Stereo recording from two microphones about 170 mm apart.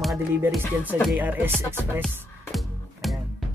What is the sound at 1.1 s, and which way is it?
Speech, 10° right (ahead or behind).